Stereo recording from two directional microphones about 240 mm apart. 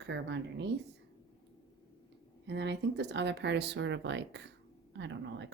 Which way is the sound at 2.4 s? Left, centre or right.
Right.